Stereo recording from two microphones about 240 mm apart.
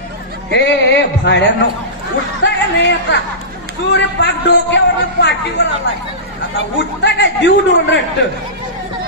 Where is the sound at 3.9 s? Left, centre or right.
Left.